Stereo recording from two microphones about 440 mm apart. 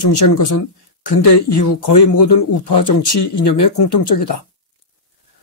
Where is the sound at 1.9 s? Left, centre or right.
Left.